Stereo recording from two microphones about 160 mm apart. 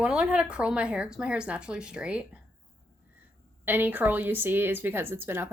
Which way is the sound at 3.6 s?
10° right (ahead or behind).